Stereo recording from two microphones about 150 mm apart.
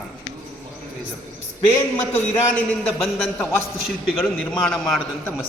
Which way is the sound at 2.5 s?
5° left (ahead or behind).